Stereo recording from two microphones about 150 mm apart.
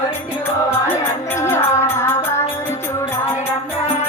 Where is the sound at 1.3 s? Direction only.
15° left (ahead or behind).